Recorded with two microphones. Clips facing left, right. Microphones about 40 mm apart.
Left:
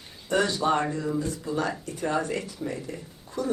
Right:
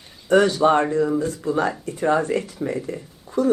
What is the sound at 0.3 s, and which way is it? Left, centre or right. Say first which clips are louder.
Speech: right 8 dB; right.